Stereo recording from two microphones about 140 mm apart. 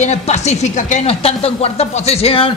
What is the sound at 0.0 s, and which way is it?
Speech, 55° left (ahead or behind).